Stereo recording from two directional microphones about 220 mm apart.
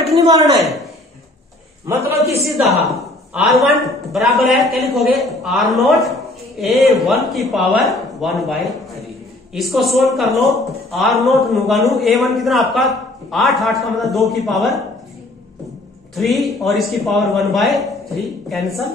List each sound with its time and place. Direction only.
0.0 s speech: 20° right (ahead or behind)
0.6 s speech: centre (ahead or behind)
1.9 s a man's voice: 10° right (ahead or behind)
2.4 s speech: centre (ahead or behind)
16.2 s speech: centre (ahead or behind)